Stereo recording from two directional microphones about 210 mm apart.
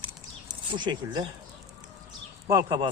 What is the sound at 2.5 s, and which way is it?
Speech, 15° right (ahead or behind).